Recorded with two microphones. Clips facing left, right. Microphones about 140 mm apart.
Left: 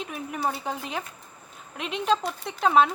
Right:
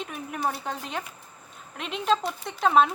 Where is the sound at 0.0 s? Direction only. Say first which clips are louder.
Left 1 dB; centre (ahead or behind).